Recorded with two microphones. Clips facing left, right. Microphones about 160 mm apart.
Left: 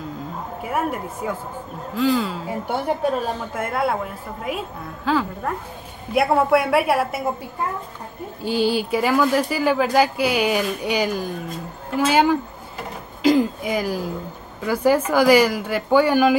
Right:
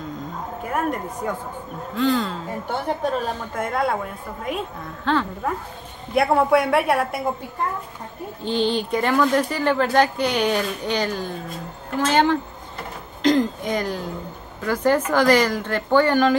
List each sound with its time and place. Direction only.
0.6 s a woman's voice: 5° left (ahead or behind)
8.5 s speech: 5° left (ahead or behind)